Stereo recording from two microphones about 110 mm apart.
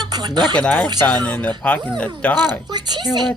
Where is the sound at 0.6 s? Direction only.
10° left (ahead or behind).